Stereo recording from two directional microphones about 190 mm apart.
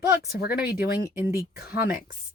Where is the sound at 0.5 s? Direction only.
10° right (ahead or behind).